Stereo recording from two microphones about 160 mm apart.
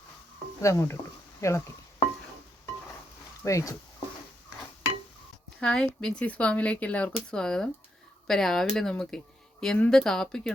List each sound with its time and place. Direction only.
0.6 s speech: 20° left (ahead or behind)
3.4 s speech: 20° left (ahead or behind)
5.5 s speech: 5° left (ahead or behind)